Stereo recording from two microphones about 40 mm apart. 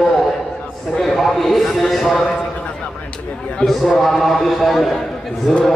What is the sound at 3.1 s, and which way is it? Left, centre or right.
Speech, left.